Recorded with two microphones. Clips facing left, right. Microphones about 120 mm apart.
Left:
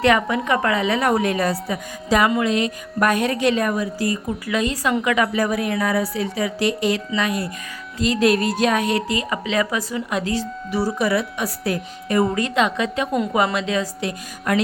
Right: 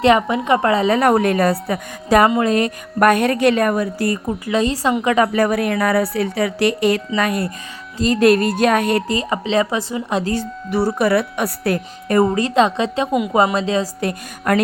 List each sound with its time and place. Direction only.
0.0 s a woman's voice: 25° right (ahead or behind)
0.9 s a woman's voice: 55° right (ahead or behind)
4.3 s a woman's voice: 30° right (ahead or behind)
5.3 s speech: 60° right (ahead or behind)
7.9 s a woman's voice: 45° right (ahead or behind)
9.1 s a woman's voice: 30° right (ahead or behind)
10.3 s speech: 60° right (ahead or behind)
12.3 s a woman's voice: 35° right (ahead or behind)
13.1 s a woman's voice: 5° right (ahead or behind)
13.3 s a woman's voice: 30° right (ahead or behind)
14.0 s a woman's voice: 50° right (ahead or behind)